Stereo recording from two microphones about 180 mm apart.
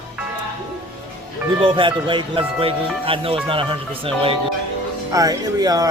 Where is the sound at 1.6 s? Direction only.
30° right (ahead or behind).